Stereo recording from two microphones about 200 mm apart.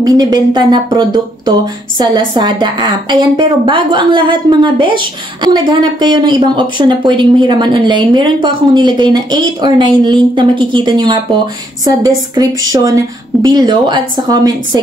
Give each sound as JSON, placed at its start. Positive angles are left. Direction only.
{"t": 0.0, "sound": "speech", "side_deg": -20}